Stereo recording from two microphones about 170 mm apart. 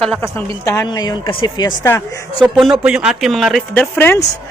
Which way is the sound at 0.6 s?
20° left (ahead or behind).